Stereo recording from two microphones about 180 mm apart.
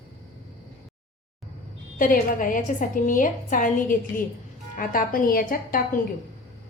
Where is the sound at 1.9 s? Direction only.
50° left (ahead or behind).